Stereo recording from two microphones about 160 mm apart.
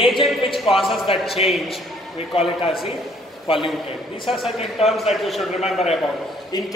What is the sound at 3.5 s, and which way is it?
Speech, 35° left (ahead or behind).